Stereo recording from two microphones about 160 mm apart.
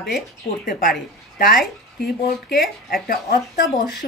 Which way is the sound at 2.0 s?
85° left.